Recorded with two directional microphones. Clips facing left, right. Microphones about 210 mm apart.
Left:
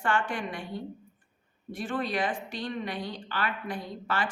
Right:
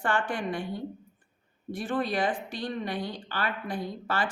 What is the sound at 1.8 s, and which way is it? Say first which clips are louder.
A woman's voice: right 2 dB; 35° right (ahead or behind).